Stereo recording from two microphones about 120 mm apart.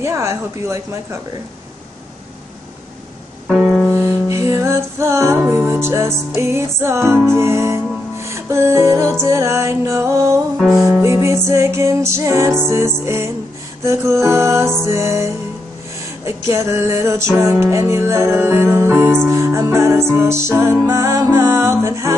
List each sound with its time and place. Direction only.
0.0 s music: 25° right (ahead or behind)
3.4 s music: 5° right (ahead or behind)
3.9 s music: 20° right (ahead or behind)